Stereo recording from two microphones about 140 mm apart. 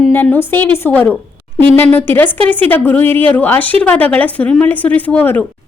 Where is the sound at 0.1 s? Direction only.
15° left (ahead or behind).